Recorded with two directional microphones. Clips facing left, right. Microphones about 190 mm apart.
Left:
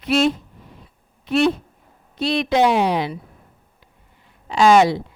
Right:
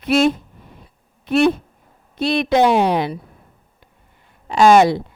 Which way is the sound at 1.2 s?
55° right (ahead or behind).